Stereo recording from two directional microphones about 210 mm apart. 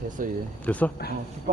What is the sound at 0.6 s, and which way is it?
Speech, 5° left (ahead or behind).